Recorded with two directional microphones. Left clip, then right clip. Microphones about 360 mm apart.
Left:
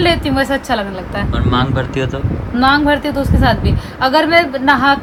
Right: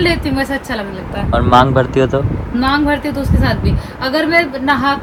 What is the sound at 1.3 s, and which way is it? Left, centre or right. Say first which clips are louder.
A woman's voice: right 9 dB; centre.